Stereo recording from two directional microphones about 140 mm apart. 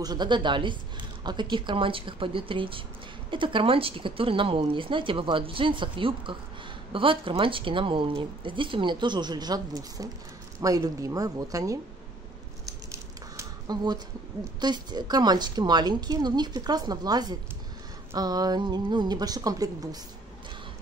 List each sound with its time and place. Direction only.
0.0 s a woman's voice: 30° right (ahead or behind)
12.6 s a sound: 25° right (ahead or behind)
14.6 s a woman's voice: 30° right (ahead or behind)